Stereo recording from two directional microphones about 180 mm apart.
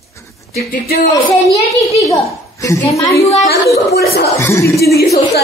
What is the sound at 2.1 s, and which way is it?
A woman's voice, 15° left (ahead or behind).